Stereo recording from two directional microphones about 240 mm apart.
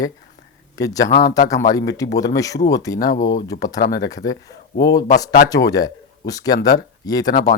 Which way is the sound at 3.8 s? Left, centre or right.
Left.